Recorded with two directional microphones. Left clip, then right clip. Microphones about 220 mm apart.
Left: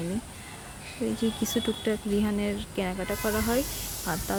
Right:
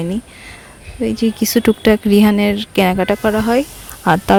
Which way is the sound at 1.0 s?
40° right (ahead or behind).